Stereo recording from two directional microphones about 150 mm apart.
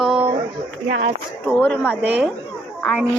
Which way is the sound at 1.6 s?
10° left (ahead or behind).